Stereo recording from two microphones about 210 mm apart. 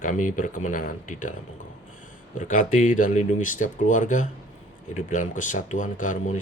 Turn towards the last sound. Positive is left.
turn(degrees=35)  # may be behind; listen again after turning